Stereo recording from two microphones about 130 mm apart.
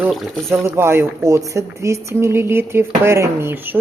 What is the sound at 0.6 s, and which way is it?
A woman's voice, 20° right (ahead or behind).